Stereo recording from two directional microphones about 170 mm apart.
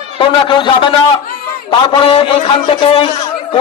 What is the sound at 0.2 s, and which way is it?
A man's voice, 30° left (ahead or behind).